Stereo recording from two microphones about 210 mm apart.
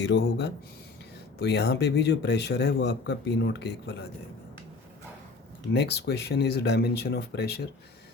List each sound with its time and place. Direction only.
0.0 s a man's voice: 55° left (ahead or behind)
5.7 s a man's voice: 50° left (ahead or behind)